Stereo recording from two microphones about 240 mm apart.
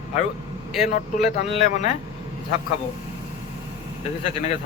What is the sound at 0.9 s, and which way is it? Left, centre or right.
Speech, left.